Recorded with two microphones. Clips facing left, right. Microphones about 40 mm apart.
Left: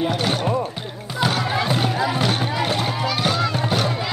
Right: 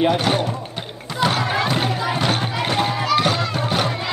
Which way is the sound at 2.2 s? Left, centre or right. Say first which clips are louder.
Even; centre.